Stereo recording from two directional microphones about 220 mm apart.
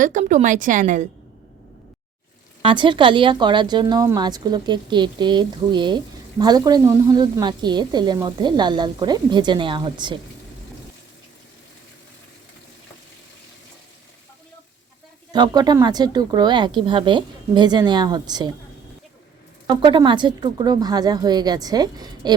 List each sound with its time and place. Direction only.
0.0 s speech: 35° right (ahead or behind)
2.6 s a woman's voice: 20° right (ahead or behind)
15.3 s a woman's voice: 20° right (ahead or behind)
19.6 s speech: 20° right (ahead or behind)